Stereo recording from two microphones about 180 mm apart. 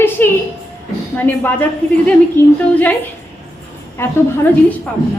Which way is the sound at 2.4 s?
10° left (ahead or behind).